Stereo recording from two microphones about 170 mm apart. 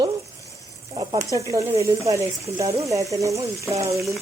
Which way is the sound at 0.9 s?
20° right (ahead or behind).